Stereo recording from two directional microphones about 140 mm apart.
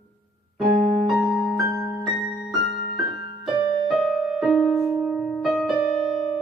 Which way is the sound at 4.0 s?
Centre (ahead or behind).